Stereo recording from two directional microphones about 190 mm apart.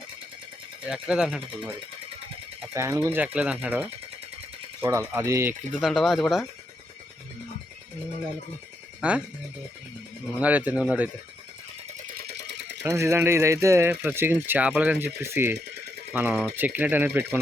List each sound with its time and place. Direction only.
0.9 s speech: 5° right (ahead or behind)
2.7 s speech: 15° right (ahead or behind)
5.8 s speech: centre (ahead or behind)
9.0 s speech: 5° right (ahead or behind)
10.4 s speech: 10° right (ahead or behind)
12.4 s a sound: 65° right (ahead or behind)
12.8 s speech: 15° right (ahead or behind)